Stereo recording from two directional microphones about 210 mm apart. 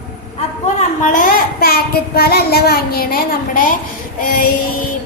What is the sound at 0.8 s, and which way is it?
Child singing, 40° left (ahead or behind).